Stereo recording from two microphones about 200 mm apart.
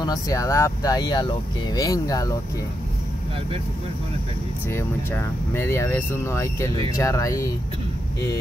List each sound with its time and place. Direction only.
0.0 s speech: 20° left (ahead or behind)
4.6 s speech: 15° left (ahead or behind)